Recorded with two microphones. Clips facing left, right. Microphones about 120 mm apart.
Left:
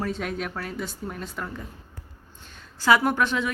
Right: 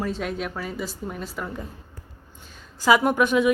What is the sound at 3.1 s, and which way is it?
Speech, 10° right (ahead or behind).